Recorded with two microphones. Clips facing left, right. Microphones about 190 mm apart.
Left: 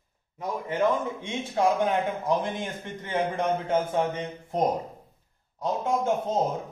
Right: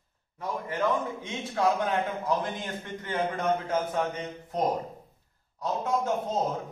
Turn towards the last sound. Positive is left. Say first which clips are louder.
# left 2 dB
turn(degrees=25)  # may be behind; listen again after turning